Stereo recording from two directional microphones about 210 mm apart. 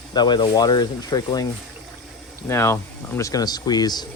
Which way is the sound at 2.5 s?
10° left (ahead or behind).